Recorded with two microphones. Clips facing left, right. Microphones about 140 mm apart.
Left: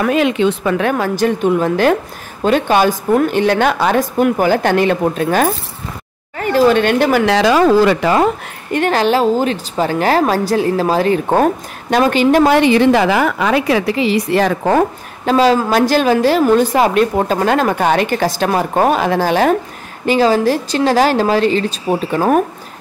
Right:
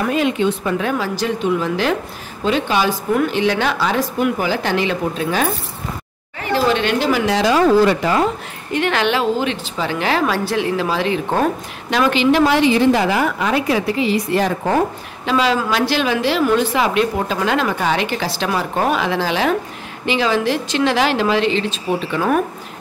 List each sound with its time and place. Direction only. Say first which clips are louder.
0.0 s a woman's voice: left 4 dB; 90° left; by 7.3 s 55° left (ahead or behind)
7.3 s speech: left 1 dB; 90° left; by 8.3 s 70° left (ahead or behind)
8.7 s a woman's voice: left 4 dB; 40° left (ahead or behind); by 14.8 s 85° left
15.2 s a woman's voice: left 5 dB; 40° left (ahead or behind)